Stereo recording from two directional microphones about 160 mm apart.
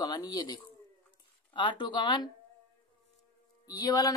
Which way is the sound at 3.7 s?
25° left (ahead or behind).